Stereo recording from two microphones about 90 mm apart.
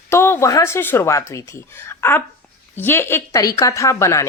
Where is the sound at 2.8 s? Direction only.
25° left (ahead or behind).